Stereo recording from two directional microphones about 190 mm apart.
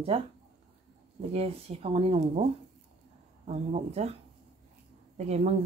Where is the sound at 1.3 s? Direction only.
35° right (ahead or behind).